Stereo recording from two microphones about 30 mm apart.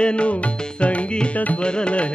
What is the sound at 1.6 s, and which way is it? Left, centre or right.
Music, left.